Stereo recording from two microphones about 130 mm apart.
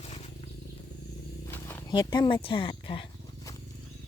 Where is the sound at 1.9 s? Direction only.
35° left (ahead or behind).